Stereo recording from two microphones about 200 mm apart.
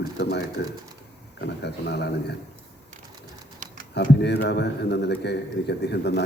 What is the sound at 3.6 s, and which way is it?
Typing, 40° right (ahead or behind).